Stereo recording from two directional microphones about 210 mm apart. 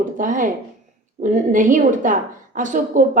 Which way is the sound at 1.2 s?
40° right (ahead or behind).